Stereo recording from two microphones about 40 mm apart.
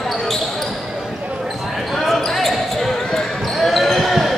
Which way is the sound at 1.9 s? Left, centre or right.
Centre.